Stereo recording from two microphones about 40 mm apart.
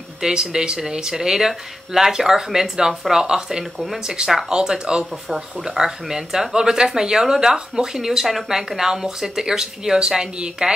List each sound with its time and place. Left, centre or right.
0.2 s speech: centre